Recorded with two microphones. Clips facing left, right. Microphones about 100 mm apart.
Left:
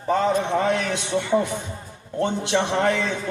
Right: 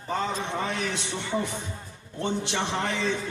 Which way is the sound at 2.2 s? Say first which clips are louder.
Left 6 dB; 55° left (ahead or behind).